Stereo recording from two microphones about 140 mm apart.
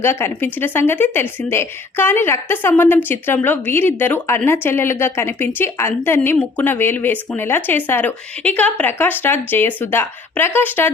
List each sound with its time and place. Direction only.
0.0 s a woman's voice: 15° left (ahead or behind)